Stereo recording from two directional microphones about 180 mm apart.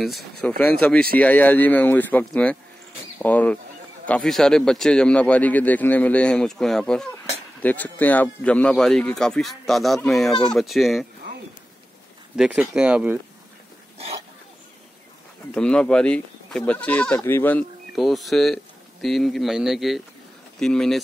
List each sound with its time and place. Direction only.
0.0 s speech: centre (ahead or behind)
12.4 s speech: 5° right (ahead or behind)
13.9 s a sound: 35° right (ahead or behind)
15.5 s speech: 5° left (ahead or behind)